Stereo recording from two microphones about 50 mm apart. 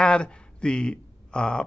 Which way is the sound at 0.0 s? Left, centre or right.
Centre.